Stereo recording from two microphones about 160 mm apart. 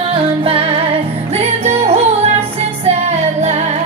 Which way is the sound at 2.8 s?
40° right (ahead or behind).